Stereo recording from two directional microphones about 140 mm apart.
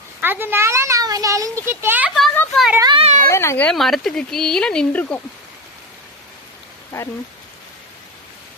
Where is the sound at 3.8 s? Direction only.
Centre (ahead or behind).